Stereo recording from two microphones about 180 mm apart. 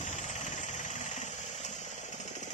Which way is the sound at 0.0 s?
40° left (ahead or behind).